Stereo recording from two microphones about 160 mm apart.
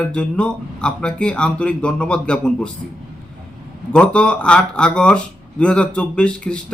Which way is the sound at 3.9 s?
5° left (ahead or behind).